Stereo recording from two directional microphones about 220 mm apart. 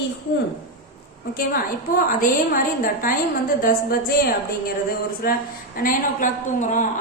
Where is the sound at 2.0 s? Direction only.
40° left (ahead or behind).